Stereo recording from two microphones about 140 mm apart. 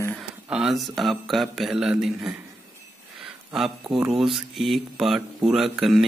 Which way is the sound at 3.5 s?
Centre (ahead or behind).